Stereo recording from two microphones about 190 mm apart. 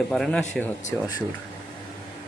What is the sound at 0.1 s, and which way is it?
Speech, centre (ahead or behind).